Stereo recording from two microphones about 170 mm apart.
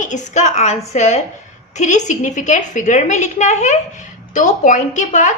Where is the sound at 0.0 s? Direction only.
45° left (ahead or behind).